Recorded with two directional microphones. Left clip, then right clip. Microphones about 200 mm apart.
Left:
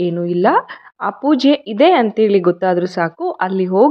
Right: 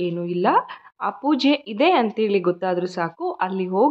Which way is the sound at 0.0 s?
25° left (ahead or behind).